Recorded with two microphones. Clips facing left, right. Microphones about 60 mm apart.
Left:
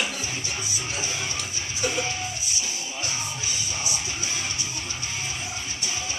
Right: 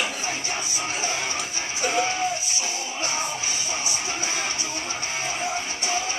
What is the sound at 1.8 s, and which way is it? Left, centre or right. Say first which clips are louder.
Music: right 4 dB; right.